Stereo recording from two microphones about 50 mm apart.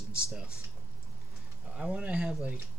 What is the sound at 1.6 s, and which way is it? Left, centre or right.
Speech, right.